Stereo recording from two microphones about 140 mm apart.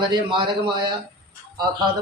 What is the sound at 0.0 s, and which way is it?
Speech, 35° right (ahead or behind).